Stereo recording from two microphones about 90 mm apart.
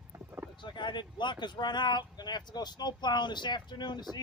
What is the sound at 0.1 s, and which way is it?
Boat, 25° right (ahead or behind).